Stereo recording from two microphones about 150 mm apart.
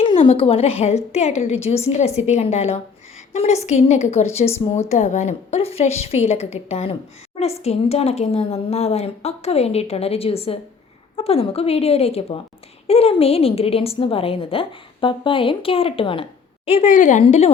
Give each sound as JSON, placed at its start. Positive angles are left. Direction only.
{"t": 0.0, "sound": "a woman's voice", "side_deg": 40}